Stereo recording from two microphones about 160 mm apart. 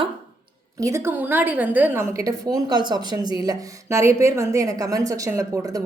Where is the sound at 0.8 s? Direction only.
15° right (ahead or behind).